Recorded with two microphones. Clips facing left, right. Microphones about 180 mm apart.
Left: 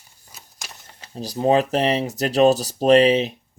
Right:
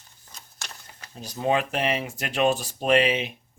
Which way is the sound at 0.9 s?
30° left (ahead or behind).